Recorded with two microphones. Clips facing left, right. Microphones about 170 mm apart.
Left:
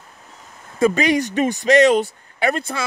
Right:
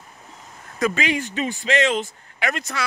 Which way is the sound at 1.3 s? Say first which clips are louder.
Left 7 dB; 45° left (ahead or behind).